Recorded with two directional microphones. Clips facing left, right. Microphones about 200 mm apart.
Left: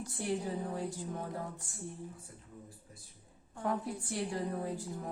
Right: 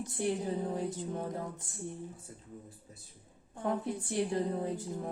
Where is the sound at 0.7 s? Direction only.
20° right (ahead or behind).